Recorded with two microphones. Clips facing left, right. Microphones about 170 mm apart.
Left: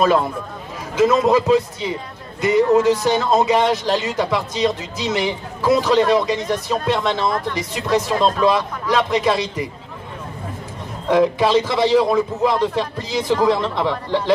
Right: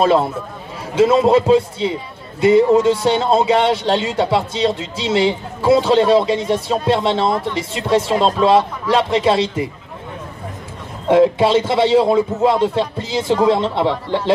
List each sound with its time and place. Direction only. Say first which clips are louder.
0.0 s a man's voice: right 2 dB; 30° right (ahead or behind)
11.1 s a man's voice: right 3 dB; 25° right (ahead or behind)